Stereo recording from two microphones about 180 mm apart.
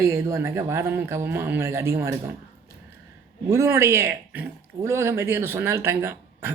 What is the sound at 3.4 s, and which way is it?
Speech, 15° right (ahead or behind).